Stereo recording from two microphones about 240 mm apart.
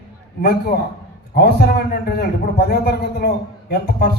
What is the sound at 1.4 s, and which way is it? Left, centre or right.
A man's voice, left.